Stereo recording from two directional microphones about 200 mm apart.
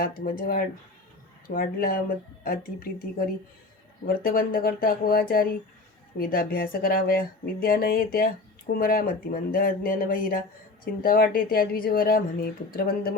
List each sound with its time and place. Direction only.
0.0 s speech: 45° left (ahead or behind)